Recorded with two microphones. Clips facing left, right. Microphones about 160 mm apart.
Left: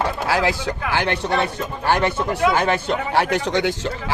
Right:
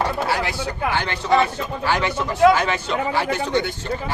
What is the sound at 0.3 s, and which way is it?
A man's voice, 90° left.